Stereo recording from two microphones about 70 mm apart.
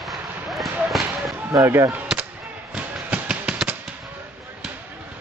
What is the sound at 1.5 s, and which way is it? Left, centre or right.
Speech, right.